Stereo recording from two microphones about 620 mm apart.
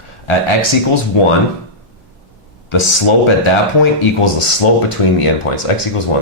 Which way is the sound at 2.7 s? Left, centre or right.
Left.